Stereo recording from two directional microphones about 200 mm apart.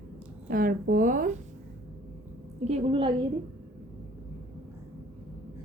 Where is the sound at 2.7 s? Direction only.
30° right (ahead or behind).